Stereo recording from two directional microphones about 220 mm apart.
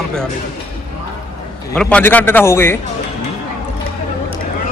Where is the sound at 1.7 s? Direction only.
5° left (ahead or behind).